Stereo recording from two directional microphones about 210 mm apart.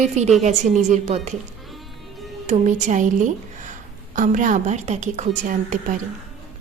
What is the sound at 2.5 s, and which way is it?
Speech, 35° right (ahead or behind).